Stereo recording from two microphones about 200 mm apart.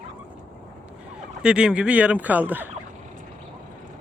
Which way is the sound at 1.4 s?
5° right (ahead or behind).